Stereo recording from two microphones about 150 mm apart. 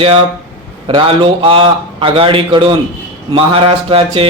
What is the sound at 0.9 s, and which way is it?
A man's voice, 35° right (ahead or behind).